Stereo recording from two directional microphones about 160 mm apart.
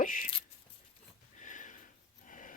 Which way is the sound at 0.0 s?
55° left (ahead or behind).